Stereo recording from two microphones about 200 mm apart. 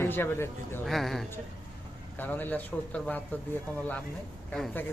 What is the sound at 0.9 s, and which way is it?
A man's voice, centre (ahead or behind).